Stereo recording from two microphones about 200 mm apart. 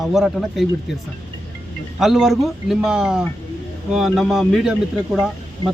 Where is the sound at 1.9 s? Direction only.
Centre (ahead or behind).